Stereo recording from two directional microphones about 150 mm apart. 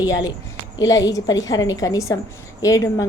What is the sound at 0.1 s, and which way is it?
A woman's voice, 25° left (ahead or behind).